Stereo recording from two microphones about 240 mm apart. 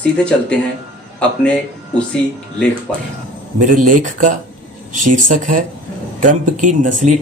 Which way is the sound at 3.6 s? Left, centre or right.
Right.